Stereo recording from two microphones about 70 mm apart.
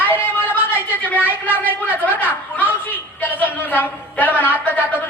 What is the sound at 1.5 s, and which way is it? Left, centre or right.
Speech, right.